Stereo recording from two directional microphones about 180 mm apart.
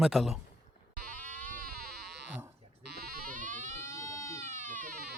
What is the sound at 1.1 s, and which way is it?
Music, 50° right (ahead or behind).